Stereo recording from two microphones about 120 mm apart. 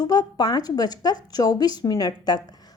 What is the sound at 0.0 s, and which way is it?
A woman's voice, 35° left (ahead or behind).